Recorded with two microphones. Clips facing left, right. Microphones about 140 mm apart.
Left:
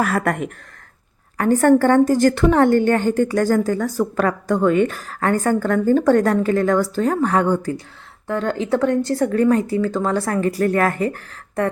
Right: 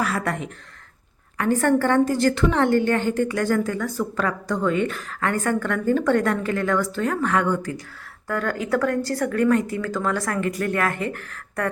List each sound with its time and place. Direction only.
0.0 s speech: 50° left (ahead or behind)
1.6 s a woman's voice: 45° left (ahead or behind); by 11.7 s 30° left (ahead or behind)